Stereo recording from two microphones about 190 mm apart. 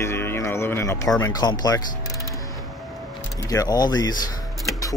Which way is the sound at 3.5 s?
20° left (ahead or behind).